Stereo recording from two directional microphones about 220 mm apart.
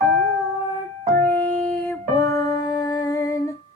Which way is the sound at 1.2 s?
10° left (ahead or behind).